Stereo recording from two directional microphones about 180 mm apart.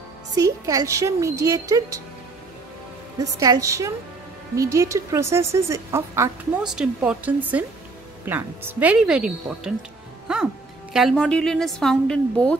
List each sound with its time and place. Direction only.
0.4 s speech: 20° right (ahead or behind)
3.2 s a woman's voice: 20° right (ahead or behind)
6.7 s a woman's voice: 5° right (ahead or behind)